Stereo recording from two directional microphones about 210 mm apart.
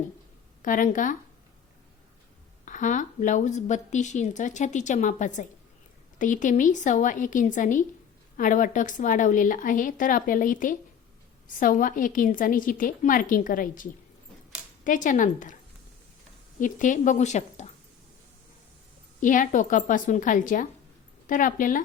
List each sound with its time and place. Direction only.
0.6 s a woman's voice: 40° left (ahead or behind)
2.6 s a woman's voice: 35° left (ahead or behind)
16.6 s a woman's voice: 40° left (ahead or behind)
19.2 s a woman's voice: 40° left (ahead or behind)